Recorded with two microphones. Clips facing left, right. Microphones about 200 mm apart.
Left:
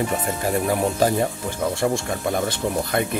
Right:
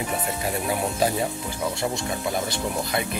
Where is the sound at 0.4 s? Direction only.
45° left (ahead or behind).